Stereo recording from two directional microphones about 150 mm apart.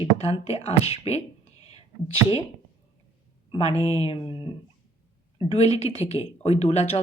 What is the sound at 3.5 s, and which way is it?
A woman's voice, 40° left (ahead or behind).